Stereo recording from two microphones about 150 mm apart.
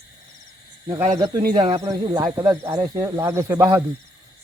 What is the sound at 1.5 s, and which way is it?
Speech, 40° right (ahead or behind).